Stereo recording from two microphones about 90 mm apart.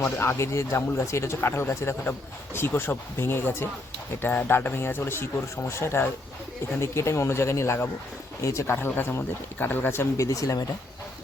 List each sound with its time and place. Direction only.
0.0 s speech: 30° left (ahead or behind)
10.2 s speech: 40° left (ahead or behind)